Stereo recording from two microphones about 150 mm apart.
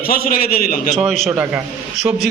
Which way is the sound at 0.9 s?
Centre (ahead or behind).